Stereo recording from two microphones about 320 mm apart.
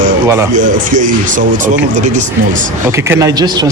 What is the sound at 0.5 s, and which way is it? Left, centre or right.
Speech, right.